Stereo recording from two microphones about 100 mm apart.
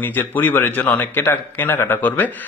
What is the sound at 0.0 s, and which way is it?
A man's voice, 20° left (ahead or behind).